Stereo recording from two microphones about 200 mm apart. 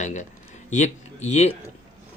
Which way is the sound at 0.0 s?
35° left (ahead or behind).